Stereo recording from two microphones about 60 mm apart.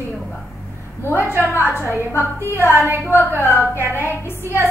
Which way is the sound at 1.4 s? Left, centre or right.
Left.